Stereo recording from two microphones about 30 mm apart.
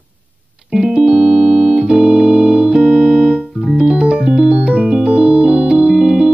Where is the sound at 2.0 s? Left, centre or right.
Right.